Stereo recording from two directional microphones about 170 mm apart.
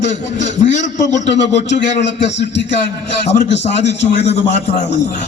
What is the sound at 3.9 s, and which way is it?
Speech, 90° left.